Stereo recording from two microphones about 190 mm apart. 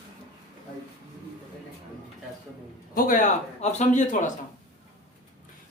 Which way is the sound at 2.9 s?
45° left (ahead or behind).